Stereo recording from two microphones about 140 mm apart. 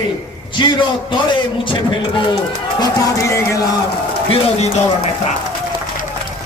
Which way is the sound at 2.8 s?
20° left (ahead or behind).